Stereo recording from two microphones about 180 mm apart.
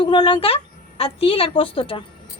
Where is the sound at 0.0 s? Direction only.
30° left (ahead or behind).